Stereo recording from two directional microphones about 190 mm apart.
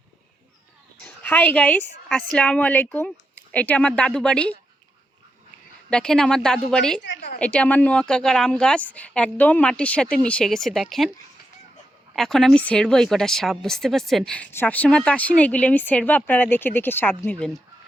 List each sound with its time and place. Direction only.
1.0 s speech: 10° left (ahead or behind)
5.9 s speech: 5° left (ahead or behind)
7.0 s a sound: 60° left (ahead or behind)
7.3 s speech: 5° left (ahead or behind)
12.1 s speech: centre (ahead or behind)